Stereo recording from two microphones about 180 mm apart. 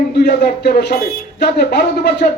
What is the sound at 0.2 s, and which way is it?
A man's voice, 65° left (ahead or behind).